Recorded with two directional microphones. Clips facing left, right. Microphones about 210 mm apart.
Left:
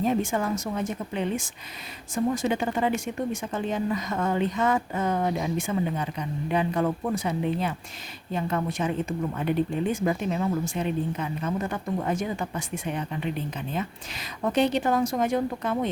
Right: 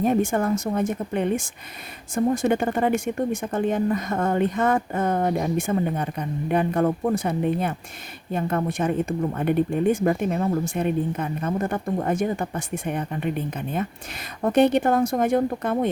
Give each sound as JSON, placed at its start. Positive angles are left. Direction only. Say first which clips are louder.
{"t": 0.0, "sound": "speech", "louder": "right 4 dB", "side_deg": -50}